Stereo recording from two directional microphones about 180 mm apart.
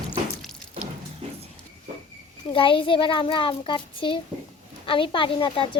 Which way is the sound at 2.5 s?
30° left (ahead or behind).